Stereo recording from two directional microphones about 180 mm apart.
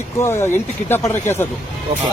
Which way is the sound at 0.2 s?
15° left (ahead or behind).